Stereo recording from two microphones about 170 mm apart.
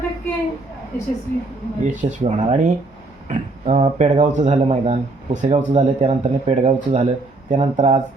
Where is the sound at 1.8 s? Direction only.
45° right (ahead or behind).